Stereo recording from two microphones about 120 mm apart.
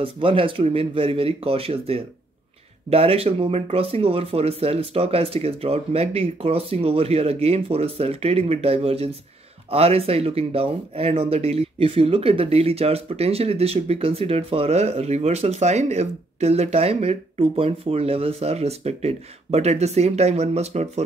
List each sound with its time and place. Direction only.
0.0 s speech: 50° right (ahead or behind); by 21.0 s 70° right (ahead or behind)